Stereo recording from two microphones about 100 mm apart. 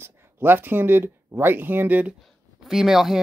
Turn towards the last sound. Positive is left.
turn(degrees=-5)  # may be behind; listen again after turning